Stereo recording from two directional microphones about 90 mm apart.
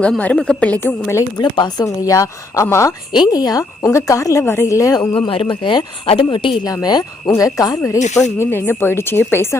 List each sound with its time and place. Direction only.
0.2 s a woman's voice: 15° left (ahead or behind)
1.4 s speech: 55° left (ahead or behind)
1.8 s speech: 40° left (ahead or behind)
3.1 s speech: 50° left (ahead or behind)
5.3 s speech: 80° left
6.7 s speech: 45° left (ahead or behind); by 9.6 s 30° left (ahead or behind)